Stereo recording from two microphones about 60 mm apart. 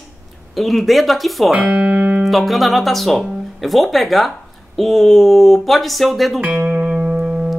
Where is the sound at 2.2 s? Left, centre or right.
Centre.